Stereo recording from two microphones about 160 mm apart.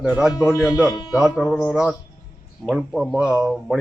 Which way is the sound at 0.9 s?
25° left (ahead or behind).